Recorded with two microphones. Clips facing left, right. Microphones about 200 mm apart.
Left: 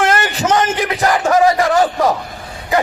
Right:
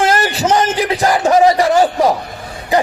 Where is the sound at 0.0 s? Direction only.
35° right (ahead or behind).